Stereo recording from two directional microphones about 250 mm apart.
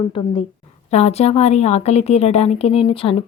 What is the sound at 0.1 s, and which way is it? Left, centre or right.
A woman's voice, left.